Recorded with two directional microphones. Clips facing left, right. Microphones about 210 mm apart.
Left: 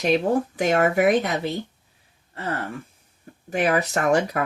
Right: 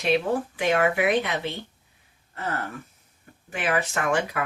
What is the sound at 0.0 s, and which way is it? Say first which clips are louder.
Speech: left 3 dB; 40° left (ahead or behind).